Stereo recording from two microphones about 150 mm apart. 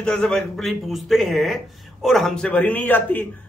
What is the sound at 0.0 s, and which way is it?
Speech, 5° left (ahead or behind).